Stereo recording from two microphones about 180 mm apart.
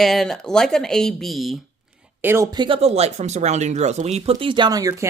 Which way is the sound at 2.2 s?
10° right (ahead or behind).